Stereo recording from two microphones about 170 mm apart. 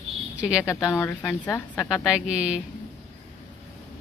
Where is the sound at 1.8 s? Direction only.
5° right (ahead or behind).